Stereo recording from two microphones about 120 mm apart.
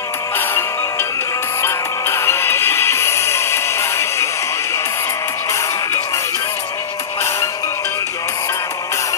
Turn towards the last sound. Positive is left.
turn(degrees=25)  # may be behind; listen again after turning